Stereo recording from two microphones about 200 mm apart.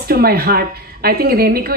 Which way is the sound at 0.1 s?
50° right (ahead or behind).